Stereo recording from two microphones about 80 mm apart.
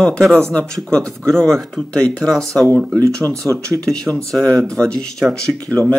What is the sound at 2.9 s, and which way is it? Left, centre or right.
Speech, right.